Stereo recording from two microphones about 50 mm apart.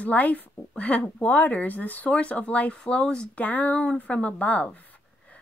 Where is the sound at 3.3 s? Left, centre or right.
Left.